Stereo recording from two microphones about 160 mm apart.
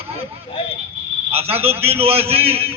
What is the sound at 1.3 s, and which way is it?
A man's voice, 40° right (ahead or behind).